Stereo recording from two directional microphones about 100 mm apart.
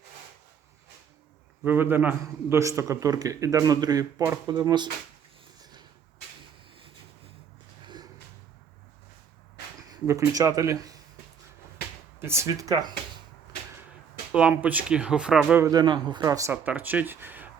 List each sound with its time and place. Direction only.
1.6 s a man's voice: 20° right (ahead or behind)
2.6 s speech: 30° right (ahead or behind); by 4.9 s 45° right (ahead or behind)
9.9 s speech: 35° right (ahead or behind)
12.2 s speech: 25° right (ahead or behind)
14.6 s speech: 15° right (ahead or behind)
15.7 s speech: 50° right (ahead or behind)
16.2 s speech: 35° right (ahead or behind)
16.5 s speech: 15° right (ahead or behind)